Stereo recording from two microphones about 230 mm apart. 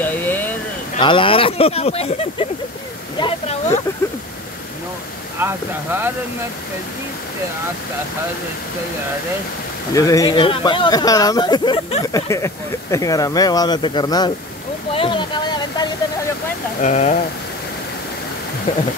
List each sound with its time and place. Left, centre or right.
0.0 s vehicle: centre
0.9 s speech: left
3.2 s a sound: left
5.4 s speech: centre
9.9 s speech: centre
15.0 s a sound: left
16.8 s speech: left